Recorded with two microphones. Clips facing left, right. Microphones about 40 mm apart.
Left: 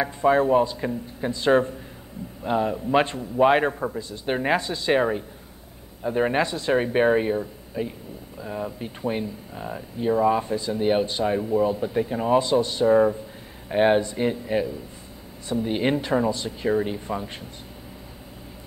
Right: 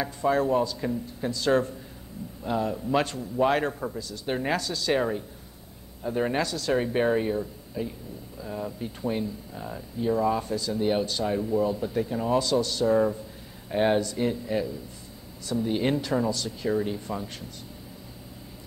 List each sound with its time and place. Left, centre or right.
0.0 s speech: left